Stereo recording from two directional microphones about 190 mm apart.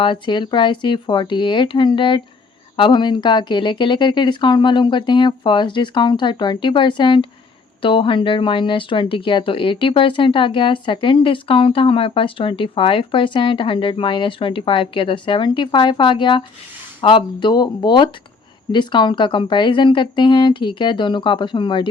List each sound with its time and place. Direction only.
0.0 s speech: 25° left (ahead or behind)